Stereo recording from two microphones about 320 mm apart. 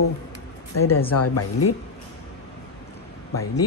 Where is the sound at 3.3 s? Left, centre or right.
Left.